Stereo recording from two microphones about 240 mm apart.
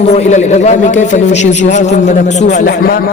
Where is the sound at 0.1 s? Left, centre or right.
Left.